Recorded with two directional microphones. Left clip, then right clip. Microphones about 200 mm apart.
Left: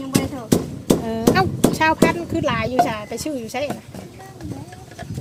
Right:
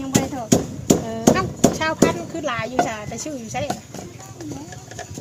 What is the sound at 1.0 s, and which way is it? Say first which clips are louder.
A child's voice: left 1 dB; 55° left (ahead or behind).